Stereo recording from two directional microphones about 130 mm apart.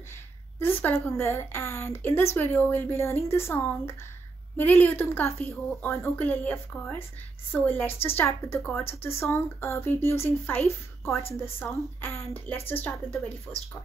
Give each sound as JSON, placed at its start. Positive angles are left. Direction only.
{"t": 0.6, "sound": "speech", "side_deg": 15}